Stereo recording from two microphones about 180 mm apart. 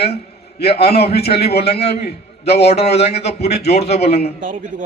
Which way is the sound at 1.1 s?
35° left (ahead or behind).